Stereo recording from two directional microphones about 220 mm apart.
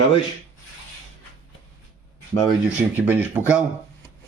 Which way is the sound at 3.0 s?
10° right (ahead or behind).